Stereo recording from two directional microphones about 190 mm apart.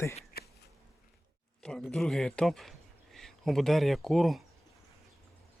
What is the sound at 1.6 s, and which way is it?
Speech, 5° left (ahead or behind).